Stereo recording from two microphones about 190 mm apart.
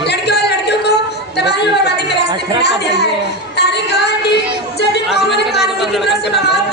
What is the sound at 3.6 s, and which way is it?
Music, 60° left (ahead or behind).